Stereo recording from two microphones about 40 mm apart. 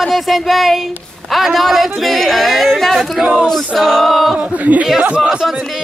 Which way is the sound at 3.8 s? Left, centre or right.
Centre.